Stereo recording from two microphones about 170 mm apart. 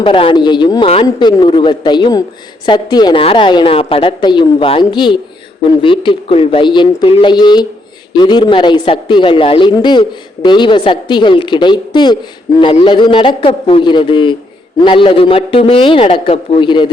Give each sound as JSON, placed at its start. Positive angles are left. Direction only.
{"t": 0.0, "sound": "a man's voice", "side_deg": 30}